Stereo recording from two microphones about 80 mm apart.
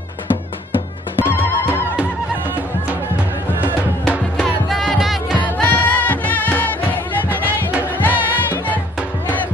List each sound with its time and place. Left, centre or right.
1.2 s music: left
4.4 s music: centre
5.6 s music: centre
7.2 s music: right
8.0 s music: left